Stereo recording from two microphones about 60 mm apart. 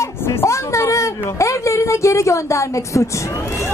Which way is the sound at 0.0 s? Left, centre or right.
Left.